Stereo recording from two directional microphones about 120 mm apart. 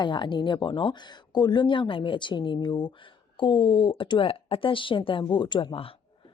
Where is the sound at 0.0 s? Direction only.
40° left (ahead or behind).